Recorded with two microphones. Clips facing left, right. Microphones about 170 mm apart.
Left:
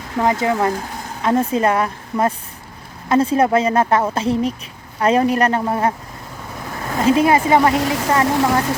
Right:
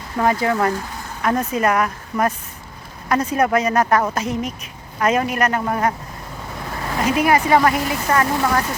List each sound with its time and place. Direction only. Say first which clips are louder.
0.2 s speech: left 1 dB; 20° left (ahead or behind)
7.0 s speech: left 3 dB; 25° left (ahead or behind)